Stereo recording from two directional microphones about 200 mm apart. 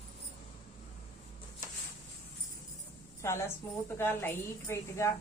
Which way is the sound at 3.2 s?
15° left (ahead or behind).